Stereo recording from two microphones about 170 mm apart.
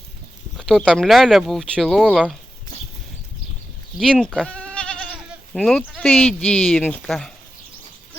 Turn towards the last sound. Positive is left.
turn(degrees=5)  # may be behind; listen again after turning